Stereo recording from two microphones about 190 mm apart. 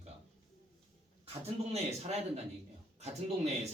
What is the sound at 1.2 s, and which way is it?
Speech, 35° right (ahead or behind).